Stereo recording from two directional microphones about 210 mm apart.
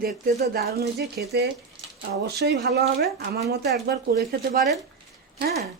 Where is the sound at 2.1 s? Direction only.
50° right (ahead or behind).